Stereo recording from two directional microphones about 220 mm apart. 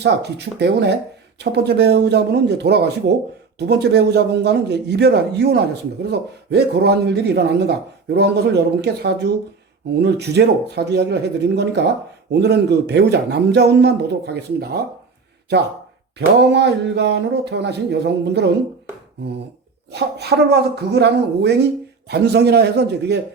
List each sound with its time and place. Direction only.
0.0 s a man's voice: 50° right (ahead or behind)
16.1 s a man's voice: 50° right (ahead or behind)
19.9 s a man's voice: 50° right (ahead or behind)